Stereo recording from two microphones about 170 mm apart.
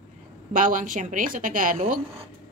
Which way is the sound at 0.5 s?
50° right (ahead or behind).